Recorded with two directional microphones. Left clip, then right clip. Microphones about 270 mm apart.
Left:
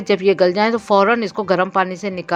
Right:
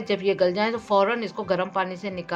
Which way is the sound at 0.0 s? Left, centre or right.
Left.